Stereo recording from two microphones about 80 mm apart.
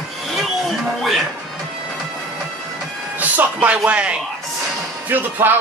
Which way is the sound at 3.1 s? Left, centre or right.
Centre.